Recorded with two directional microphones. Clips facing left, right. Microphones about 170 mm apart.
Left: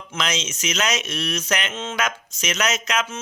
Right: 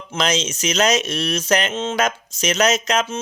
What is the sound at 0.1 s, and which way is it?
Speech, 35° right (ahead or behind).